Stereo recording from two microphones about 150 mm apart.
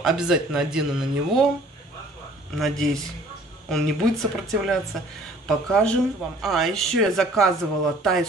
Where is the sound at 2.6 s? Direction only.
Centre (ahead or behind).